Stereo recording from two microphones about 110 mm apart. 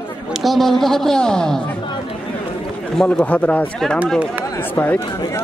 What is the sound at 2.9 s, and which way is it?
Speech, 5° left (ahead or behind).